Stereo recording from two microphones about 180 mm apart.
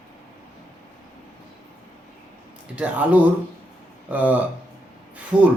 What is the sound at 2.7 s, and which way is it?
Speech, 10° right (ahead or behind).